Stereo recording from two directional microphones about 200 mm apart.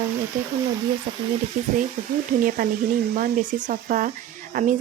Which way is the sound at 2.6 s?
45° right (ahead or behind).